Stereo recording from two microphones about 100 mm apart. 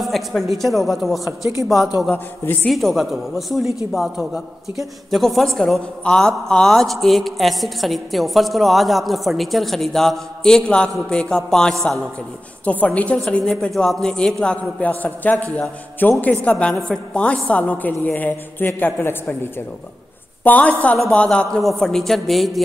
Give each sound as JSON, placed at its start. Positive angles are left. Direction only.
{"t": 0.0, "sound": "a man's voice", "side_deg": 0}
{"t": 2.0, "sound": "a man's voice", "side_deg": 20}
{"t": 2.7, "sound": "a man's voice", "side_deg": 0}
{"t": 20.4, "sound": "a woman's voice", "side_deg": 15}